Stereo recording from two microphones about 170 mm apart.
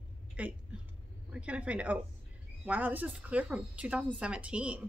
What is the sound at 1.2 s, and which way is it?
A woman's voice, 5° right (ahead or behind).